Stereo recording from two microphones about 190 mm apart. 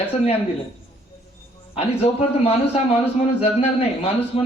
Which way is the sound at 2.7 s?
35° left (ahead or behind).